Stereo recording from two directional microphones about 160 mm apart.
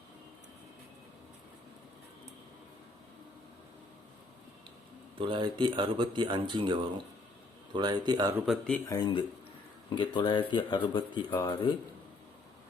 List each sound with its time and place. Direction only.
5.1 s a man's voice: 30° right (ahead or behind)
8.4 s speech: 5° left (ahead or behind)
8.9 s speech: 25° left (ahead or behind)